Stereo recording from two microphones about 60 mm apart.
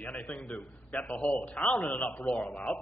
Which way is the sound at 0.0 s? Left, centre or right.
Left.